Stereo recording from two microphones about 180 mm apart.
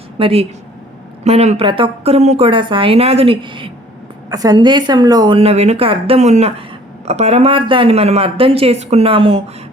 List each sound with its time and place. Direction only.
0.2 s a woman's voice: 30° right (ahead or behind)